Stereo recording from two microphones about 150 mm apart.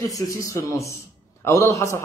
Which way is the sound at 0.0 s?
20° left (ahead or behind).